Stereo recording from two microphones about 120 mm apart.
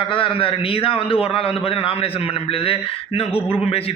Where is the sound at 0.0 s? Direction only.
45° left (ahead or behind).